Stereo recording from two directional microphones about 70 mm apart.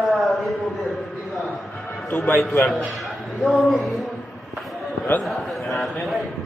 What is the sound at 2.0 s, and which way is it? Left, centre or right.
Speech, left.